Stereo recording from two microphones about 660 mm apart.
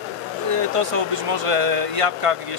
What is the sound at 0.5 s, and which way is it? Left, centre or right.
Speech, right.